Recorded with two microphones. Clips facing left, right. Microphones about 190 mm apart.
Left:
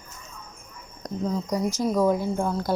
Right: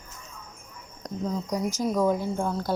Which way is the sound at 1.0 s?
5° left (ahead or behind).